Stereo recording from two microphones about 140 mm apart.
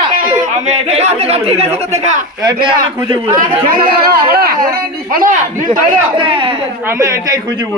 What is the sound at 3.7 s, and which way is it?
Speech, 90° right.